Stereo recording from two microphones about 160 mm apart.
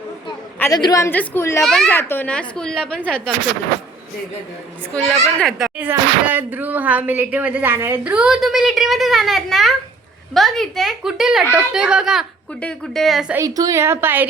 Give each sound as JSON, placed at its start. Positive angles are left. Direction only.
{"t": 0.6, "sound": "a woman's voice", "side_deg": 25}
{"t": 1.6, "sound": "speech", "side_deg": 0}
{"t": 1.9, "sound": "a woman's voice", "side_deg": 15}
{"t": 5.4, "sound": "speech", "side_deg": 0}
{"t": 5.8, "sound": "speech", "side_deg": -10}
{"t": 13.3, "sound": "speech", "side_deg": -20}